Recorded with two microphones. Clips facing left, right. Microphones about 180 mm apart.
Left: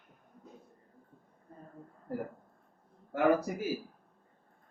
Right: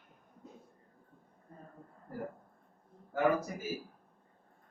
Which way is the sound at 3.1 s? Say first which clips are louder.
Left 3 dB; 70° left (ahead or behind).